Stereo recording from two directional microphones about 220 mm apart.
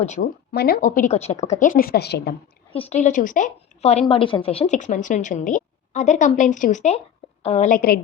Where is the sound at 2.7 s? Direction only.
30° left (ahead or behind).